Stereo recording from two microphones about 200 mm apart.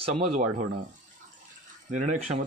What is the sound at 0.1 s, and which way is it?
Speech, 35° right (ahead or behind).